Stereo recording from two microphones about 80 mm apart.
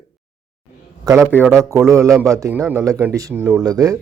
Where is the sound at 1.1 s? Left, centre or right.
Right.